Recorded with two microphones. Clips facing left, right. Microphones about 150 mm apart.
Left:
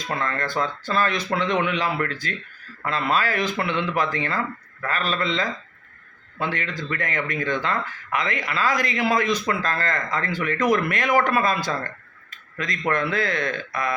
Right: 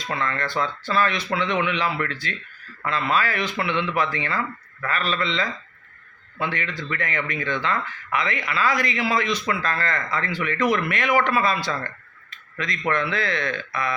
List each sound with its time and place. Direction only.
0.1 s speech: 45° left (ahead or behind)
12.3 s tick-tock: 50° left (ahead or behind)
12.9 s speech: 50° left (ahead or behind)